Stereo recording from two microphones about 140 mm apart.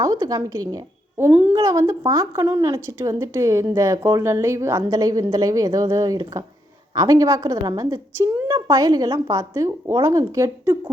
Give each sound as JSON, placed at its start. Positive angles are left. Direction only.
{"t": 0.0, "sound": "a woman's voice", "side_deg": -25}
{"t": 1.3, "sound": "speech", "side_deg": -5}
{"t": 1.6, "sound": "a woman's voice", "side_deg": -20}